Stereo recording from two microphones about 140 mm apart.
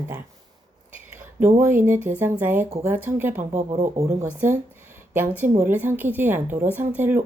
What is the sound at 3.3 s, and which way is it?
Speech, 65° right (ahead or behind).